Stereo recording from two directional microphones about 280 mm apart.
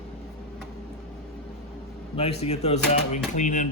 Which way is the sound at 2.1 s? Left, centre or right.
Left.